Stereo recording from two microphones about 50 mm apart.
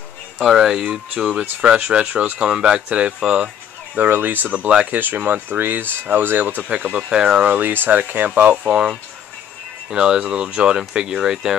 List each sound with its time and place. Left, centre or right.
0.4 s speech: centre; by 3.4 s right
4.1 s speech: right
4.9 s speech: right
7.1 s speech: centre
7.4 s speech: right
8.6 s speech: centre